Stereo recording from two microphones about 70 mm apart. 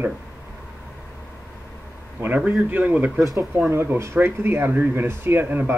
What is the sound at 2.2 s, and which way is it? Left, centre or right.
Speech, right.